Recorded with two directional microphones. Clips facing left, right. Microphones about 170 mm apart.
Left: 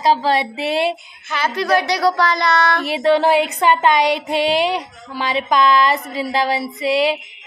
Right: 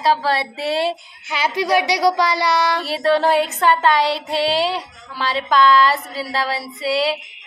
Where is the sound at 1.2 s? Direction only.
15° right (ahead or behind).